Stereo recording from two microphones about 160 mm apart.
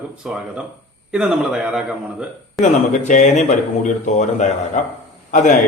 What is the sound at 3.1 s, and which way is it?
Speech, 50° left (ahead or behind).